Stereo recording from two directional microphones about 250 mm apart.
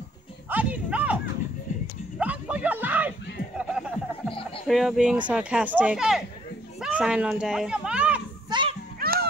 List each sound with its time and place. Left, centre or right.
0.5 s music: centre
2.1 s a sound: centre
4.3 s music: left
4.6 s speech: centre
6.8 s children playing: centre
8.5 s children playing: centre
9.0 s music: right